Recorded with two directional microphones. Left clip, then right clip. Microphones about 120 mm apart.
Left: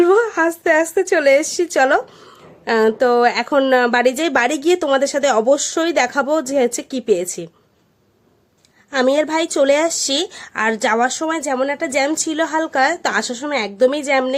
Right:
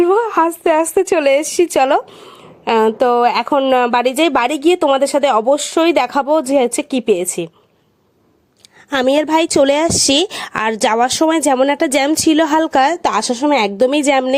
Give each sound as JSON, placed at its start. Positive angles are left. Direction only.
{"t": 0.0, "sound": "a sound", "side_deg": -35}
{"t": 0.3, "sound": "a woman's voice", "side_deg": -45}
{"t": 3.5, "sound": "speech", "side_deg": -20}
{"t": 3.8, "sound": "a woman's voice", "side_deg": -35}
{"t": 9.2, "sound": "a woman's voice", "side_deg": -90}
{"t": 13.6, "sound": "a woman's voice", "side_deg": -80}